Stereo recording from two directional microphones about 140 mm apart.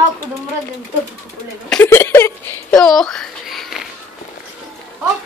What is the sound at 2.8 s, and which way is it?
A child's voice, 5° left (ahead or behind).